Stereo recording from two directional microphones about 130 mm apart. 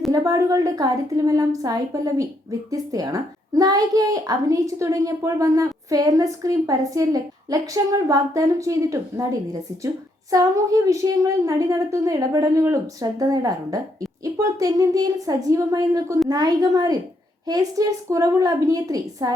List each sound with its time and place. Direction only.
0.1 s a woman's voice: 25° right (ahead or behind)